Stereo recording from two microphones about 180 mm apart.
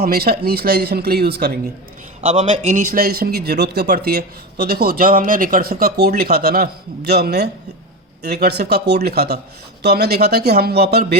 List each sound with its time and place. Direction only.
0.0 s speech: 60° right (ahead or behind)
2.3 s speech: 40° right (ahead or behind); by 11.0 s 60° right (ahead or behind)